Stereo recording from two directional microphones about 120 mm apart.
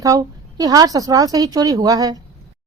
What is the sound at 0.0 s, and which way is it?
Speech, 30° right (ahead or behind).